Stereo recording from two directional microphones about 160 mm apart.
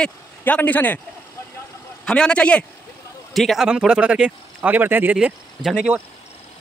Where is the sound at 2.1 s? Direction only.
5° left (ahead or behind).